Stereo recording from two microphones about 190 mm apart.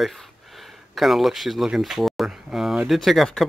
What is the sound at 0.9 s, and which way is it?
Speech, centre (ahead or behind).